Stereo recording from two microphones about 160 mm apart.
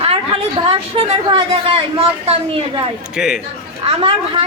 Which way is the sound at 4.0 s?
35° right (ahead or behind).